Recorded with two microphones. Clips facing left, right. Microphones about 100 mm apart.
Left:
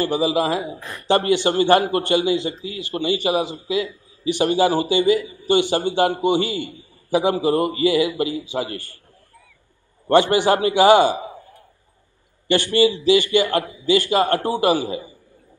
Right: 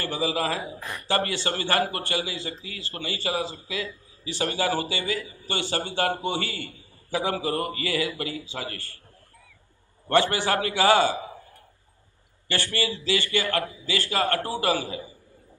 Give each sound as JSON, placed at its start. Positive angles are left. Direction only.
{"t": 0.0, "sound": "a man's voice", "side_deg": 15}
{"t": 10.0, "sound": "a man's voice", "side_deg": 20}
{"t": 12.4, "sound": "a man's voice", "side_deg": 20}